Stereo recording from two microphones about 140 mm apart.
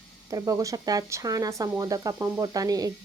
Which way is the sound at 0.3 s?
25° right (ahead or behind).